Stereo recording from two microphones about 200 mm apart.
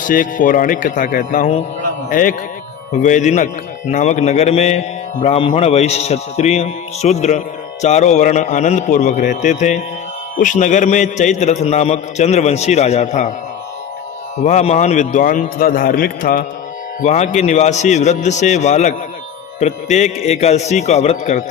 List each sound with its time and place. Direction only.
0.0 s a man's voice: 40° left (ahead or behind)
14.4 s a man's voice: 35° left (ahead or behind)